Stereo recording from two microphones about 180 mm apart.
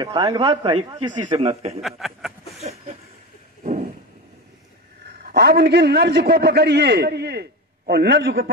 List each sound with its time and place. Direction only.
0.0 s a man's voice: 20° right (ahead or behind)
1.8 s speech: centre (ahead or behind)
5.2 s a man's voice: 65° right (ahead or behind)